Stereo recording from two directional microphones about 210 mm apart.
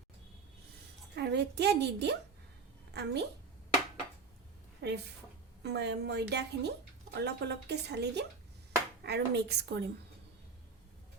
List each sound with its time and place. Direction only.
1.1 s a woman's voice: 55° right (ahead or behind)
4.8 s speech: 55° right (ahead or behind)